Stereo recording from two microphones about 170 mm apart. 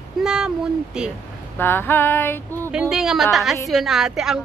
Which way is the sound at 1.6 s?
10° left (ahead or behind).